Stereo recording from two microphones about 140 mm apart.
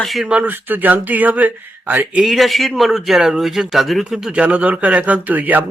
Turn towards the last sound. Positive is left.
turn(degrees=-10)  # may be behind; listen again after turning